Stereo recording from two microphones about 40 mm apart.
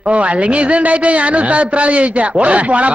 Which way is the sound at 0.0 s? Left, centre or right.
Right.